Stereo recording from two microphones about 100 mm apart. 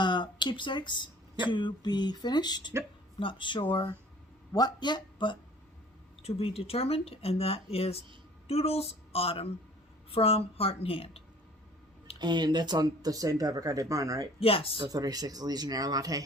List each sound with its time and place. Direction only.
0.0 s speech: 50° left (ahead or behind)
3.2 s speech: 55° left (ahead or behind)
6.2 s a woman's voice: 75° left (ahead or behind)
12.2 s speech: 45° right (ahead or behind)
14.3 s a woman's voice: 75° left (ahead or behind)
14.8 s speech: 40° right (ahead or behind)